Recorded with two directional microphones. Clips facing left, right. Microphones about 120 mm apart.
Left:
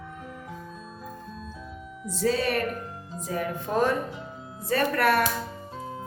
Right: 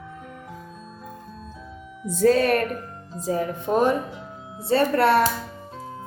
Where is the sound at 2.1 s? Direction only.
50° right (ahead or behind).